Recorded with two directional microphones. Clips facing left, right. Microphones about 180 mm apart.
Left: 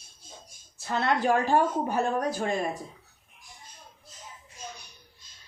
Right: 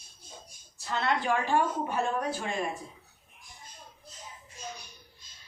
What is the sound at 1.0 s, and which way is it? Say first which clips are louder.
Speech: left 4 dB; 40° left (ahead or behind).